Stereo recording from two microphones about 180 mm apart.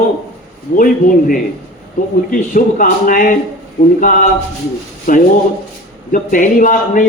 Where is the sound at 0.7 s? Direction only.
55° left (ahead or behind).